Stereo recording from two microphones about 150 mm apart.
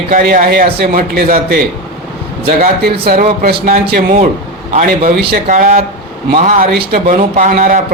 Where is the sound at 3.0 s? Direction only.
75° right (ahead or behind).